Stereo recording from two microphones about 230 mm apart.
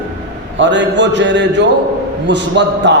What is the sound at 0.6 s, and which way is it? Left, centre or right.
A man's voice, right.